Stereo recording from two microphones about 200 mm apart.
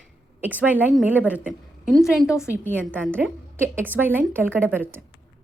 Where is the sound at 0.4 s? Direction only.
10° right (ahead or behind).